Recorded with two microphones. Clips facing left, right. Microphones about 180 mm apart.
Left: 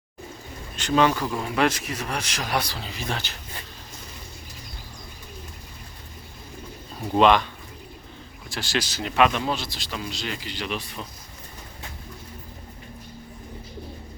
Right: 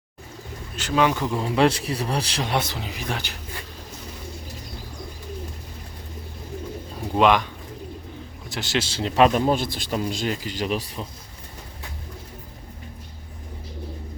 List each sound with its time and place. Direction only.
0.8 s speech: 5° right (ahead or behind)
1.1 s speech: 20° right (ahead or behind)
7.2 s speech: 10° right (ahead or behind)
8.4 s a man's voice: 20° right (ahead or behind); by 11.0 s 35° right (ahead or behind)